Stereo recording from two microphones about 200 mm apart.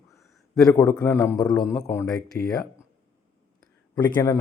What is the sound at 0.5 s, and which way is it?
Speech, 15° left (ahead or behind).